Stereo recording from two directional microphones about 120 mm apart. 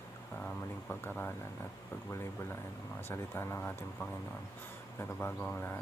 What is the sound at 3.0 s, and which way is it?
Speech, 20° left (ahead or behind).